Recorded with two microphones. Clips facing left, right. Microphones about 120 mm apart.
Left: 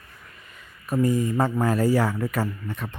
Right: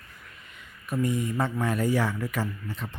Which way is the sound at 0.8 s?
35° left (ahead or behind).